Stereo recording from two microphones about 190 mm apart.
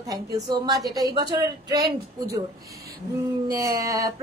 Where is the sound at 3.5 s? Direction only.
20° right (ahead or behind).